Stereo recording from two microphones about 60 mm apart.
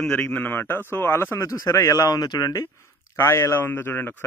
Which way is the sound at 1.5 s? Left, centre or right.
Left.